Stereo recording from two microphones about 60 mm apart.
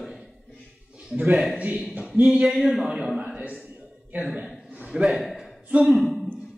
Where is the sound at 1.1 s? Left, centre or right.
Right; by 3.1 s centre.